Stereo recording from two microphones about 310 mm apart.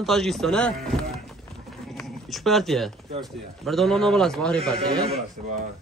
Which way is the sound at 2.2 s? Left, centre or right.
Centre.